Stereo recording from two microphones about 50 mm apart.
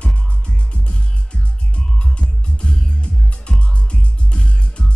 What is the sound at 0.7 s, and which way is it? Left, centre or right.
Music, left.